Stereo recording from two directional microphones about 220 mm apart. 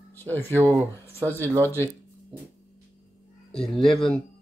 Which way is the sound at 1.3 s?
10° left (ahead or behind).